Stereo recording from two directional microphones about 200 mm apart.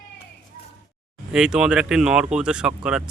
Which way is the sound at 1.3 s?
5° right (ahead or behind).